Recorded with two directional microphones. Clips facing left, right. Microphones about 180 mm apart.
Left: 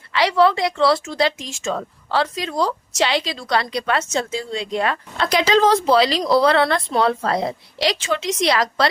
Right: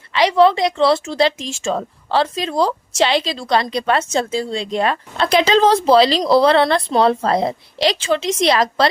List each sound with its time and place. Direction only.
0.1 s a woman's voice: 20° right (ahead or behind)